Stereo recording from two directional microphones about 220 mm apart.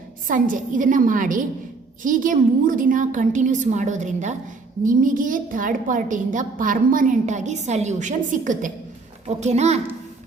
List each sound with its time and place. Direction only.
0.3 s a woman's voice: 35° right (ahead or behind)